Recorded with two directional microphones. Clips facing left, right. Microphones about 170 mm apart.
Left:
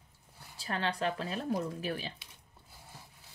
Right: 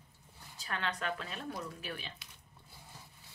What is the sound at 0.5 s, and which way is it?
Speech, 35° left (ahead or behind).